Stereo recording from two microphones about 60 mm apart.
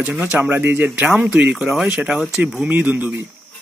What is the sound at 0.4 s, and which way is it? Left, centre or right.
Speech, right.